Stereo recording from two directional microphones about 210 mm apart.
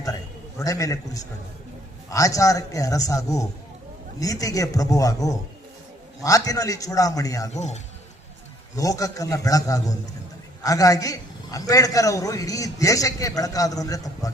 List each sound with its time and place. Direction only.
0.6 s a man's voice: 15° left (ahead or behind)
7.5 s a man's voice: 35° left (ahead or behind)
8.7 s a man's voice: 15° left (ahead or behind)